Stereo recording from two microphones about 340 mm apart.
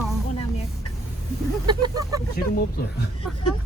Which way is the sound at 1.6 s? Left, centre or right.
Centre.